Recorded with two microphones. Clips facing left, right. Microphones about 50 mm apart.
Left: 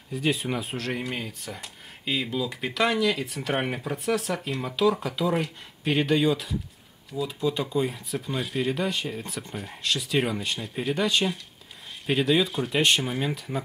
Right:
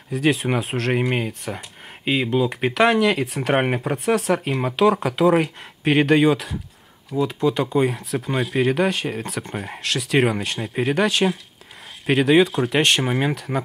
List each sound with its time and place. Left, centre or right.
0.1 s speech: right